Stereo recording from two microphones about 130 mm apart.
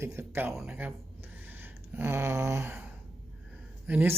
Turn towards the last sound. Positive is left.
turn(degrees=-10)  # may be behind; listen again after turning